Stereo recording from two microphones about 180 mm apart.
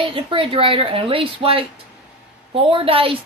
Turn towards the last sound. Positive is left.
turn(degrees=-30)  # may be behind; listen again after turning